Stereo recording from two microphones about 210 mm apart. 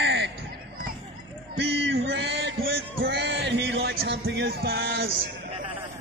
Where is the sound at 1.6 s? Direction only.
55° right (ahead or behind).